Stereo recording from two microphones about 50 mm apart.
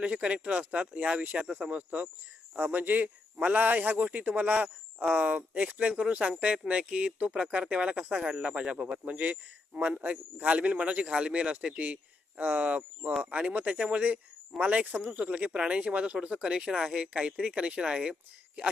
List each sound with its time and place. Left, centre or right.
0.0 s speech: right
1.4 s speech: centre
2.6 s a man's voice: right; by 18.7 s centre